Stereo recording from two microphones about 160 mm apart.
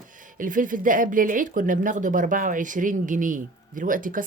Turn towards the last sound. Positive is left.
turn(degrees=-60)  # may be behind; listen again after turning